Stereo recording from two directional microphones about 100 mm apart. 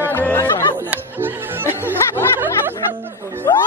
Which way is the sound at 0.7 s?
20° right (ahead or behind).